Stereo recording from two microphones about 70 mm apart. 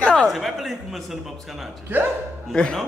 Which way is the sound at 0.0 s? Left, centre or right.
Centre.